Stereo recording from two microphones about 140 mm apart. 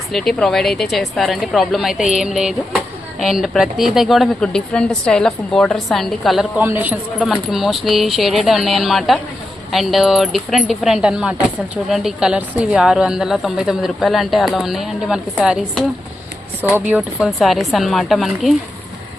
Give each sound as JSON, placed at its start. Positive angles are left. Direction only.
{"t": 0.1, "sound": "speech", "side_deg": 0}
{"t": 6.6, "sound": "a man's voice", "side_deg": -15}
{"t": 7.2, "sound": "speech", "side_deg": 0}